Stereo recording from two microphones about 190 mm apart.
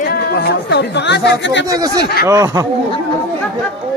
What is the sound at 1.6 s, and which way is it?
Speech, 20° right (ahead or behind).